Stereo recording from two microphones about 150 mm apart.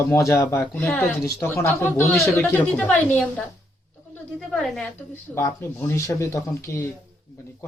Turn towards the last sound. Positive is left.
turn(degrees=20)  # may be behind; listen again after turning